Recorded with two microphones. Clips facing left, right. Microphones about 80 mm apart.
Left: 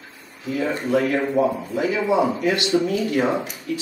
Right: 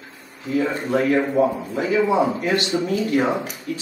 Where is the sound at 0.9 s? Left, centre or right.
Right.